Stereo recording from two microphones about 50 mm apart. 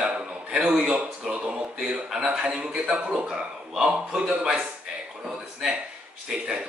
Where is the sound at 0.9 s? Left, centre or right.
Right.